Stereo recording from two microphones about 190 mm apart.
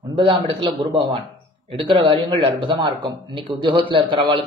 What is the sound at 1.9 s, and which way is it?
Speech, 25° right (ahead or behind).